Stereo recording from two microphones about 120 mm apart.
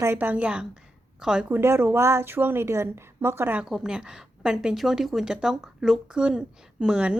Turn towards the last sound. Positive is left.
turn(degrees=-10)  # may be behind; listen again after turning